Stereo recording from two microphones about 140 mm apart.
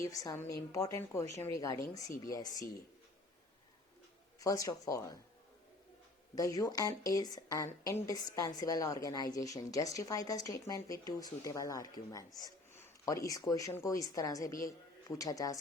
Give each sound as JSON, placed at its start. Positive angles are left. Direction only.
{"t": 0.0, "sound": "a woman's voice", "side_deg": 25}
{"t": 4.4, "sound": "a woman's voice", "side_deg": 25}
{"t": 6.3, "sound": "a woman's voice", "side_deg": 25}